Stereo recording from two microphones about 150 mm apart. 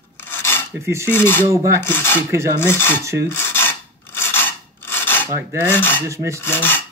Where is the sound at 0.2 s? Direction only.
15° left (ahead or behind).